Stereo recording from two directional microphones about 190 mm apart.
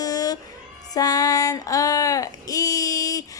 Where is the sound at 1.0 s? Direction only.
20° left (ahead or behind).